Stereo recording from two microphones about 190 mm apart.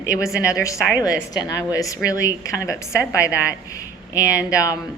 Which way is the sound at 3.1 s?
15° left (ahead or behind).